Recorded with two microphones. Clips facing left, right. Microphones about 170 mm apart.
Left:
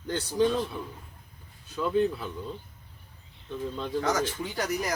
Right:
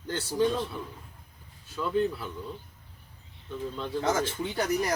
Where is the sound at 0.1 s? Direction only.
15° left (ahead or behind).